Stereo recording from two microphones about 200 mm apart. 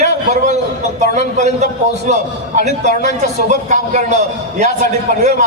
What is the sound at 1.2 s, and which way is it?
A man's voice, 35° right (ahead or behind).